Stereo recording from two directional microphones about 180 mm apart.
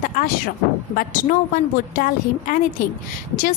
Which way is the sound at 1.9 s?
50° left (ahead or behind).